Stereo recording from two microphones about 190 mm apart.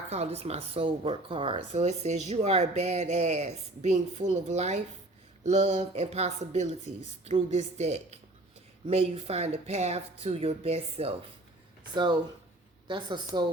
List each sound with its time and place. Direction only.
0.1 s speech: 35° right (ahead or behind)
12.9 s a woman's voice: 25° right (ahead or behind)